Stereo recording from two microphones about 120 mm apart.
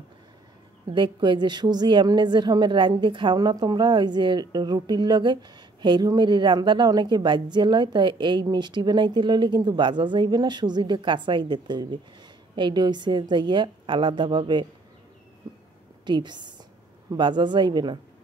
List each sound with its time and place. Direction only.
0.8 s a woman's voice: 40° right (ahead or behind)
16.1 s a woman's voice: 40° right (ahead or behind)